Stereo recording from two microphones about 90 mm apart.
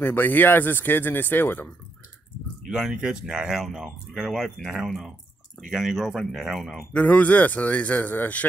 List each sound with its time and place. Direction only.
0.0 s speech: 25° left (ahead or behind)
2.7 s speech: 5° right (ahead or behind)
6.9 s a man's voice: 15° left (ahead or behind)